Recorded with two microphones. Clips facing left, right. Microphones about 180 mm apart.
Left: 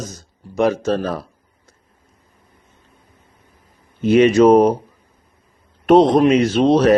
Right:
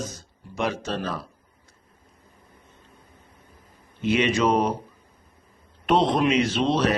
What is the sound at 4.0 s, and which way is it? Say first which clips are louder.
Speech: left 10 dB; 45° left (ahead or behind).